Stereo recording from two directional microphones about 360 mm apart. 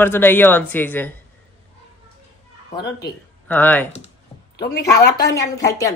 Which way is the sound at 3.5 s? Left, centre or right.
Centre.